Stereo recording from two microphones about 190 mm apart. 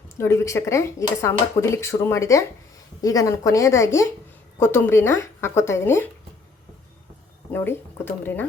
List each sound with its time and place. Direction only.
0.2 s speech: 15° left (ahead or behind)
7.5 s speech: 10° left (ahead or behind)